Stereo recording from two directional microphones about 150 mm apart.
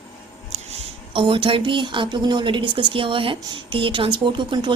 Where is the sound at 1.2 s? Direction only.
35° right (ahead or behind).